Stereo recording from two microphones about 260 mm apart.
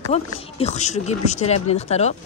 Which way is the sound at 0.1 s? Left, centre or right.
Left.